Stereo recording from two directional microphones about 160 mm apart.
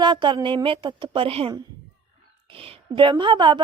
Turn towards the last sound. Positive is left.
turn(degrees=-30)  # may be behind; listen again after turning